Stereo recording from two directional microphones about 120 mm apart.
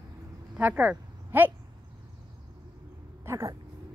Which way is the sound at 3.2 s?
25° right (ahead or behind).